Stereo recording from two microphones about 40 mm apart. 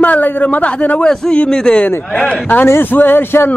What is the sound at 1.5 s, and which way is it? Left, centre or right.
Speech, centre.